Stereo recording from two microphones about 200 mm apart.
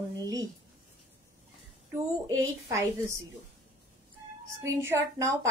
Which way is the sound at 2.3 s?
15° right (ahead or behind).